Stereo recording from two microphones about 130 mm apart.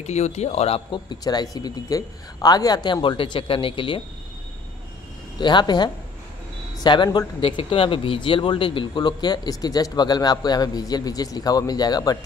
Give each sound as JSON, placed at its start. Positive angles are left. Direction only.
{"t": 0.0, "sound": "speech", "side_deg": 60}
{"t": 1.2, "sound": "speech", "side_deg": 30}
{"t": 5.4, "sound": "speech", "side_deg": 35}